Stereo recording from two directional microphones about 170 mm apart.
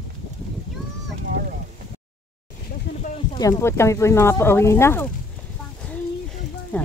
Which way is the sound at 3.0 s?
40° left (ahead or behind).